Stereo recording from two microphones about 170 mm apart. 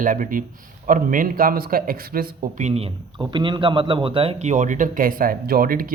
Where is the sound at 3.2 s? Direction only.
30° right (ahead or behind); by 5.9 s 55° right (ahead or behind).